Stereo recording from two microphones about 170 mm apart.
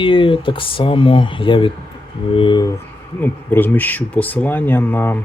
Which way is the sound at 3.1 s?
10° left (ahead or behind).